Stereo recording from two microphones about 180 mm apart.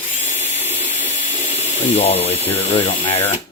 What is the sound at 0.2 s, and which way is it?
Tools, 35° left (ahead or behind).